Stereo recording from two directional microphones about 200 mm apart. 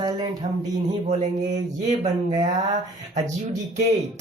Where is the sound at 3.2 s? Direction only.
35° right (ahead or behind).